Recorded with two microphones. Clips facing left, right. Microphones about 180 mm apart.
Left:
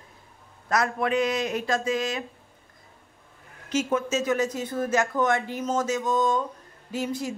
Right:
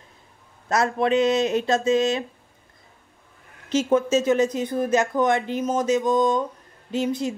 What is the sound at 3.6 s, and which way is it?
Speech, 30° right (ahead or behind).